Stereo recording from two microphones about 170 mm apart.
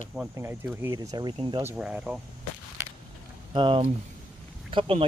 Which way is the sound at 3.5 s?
30° right (ahead or behind).